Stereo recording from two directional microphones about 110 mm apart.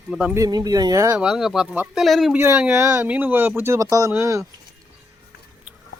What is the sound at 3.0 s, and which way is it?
Speech, 15° right (ahead or behind).